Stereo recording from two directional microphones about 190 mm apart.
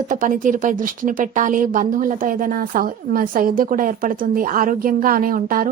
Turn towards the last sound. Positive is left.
turn(degrees=-45)  # may be behind; listen again after turning